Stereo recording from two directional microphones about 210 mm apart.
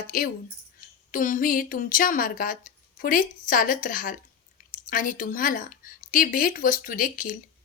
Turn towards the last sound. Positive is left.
turn(degrees=40)  # may be behind; listen again after turning